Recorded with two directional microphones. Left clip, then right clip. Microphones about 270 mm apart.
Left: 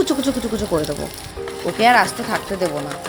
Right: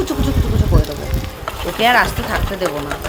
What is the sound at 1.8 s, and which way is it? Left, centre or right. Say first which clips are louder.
Speech: right 1 dB; centre.